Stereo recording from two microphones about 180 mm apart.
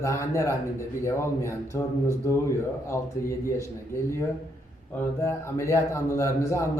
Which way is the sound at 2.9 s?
15° left (ahead or behind).